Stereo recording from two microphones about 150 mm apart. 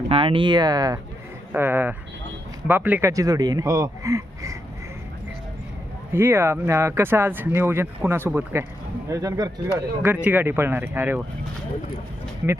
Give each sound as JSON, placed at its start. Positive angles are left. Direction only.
{"t": 0.1, "sound": "speech", "side_deg": -35}
{"t": 1.5, "sound": "speech", "side_deg": -15}
{"t": 6.1, "sound": "speech", "side_deg": -15}
{"t": 9.7, "sound": "speech", "side_deg": -10}